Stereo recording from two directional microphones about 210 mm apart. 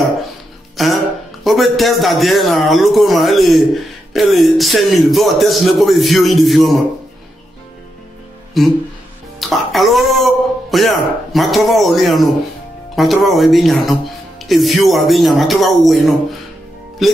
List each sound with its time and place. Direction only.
0.8 s music: centre (ahead or behind)
1.4 s a man's voice: centre (ahead or behind)
8.6 s a man's voice: centre (ahead or behind)